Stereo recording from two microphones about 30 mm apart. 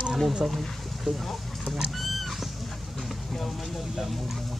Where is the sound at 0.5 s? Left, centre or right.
Centre.